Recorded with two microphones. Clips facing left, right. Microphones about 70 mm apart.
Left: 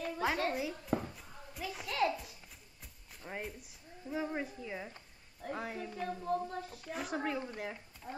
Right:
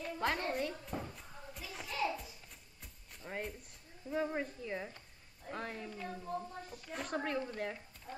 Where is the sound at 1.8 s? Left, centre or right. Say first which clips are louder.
Left 4 dB; left.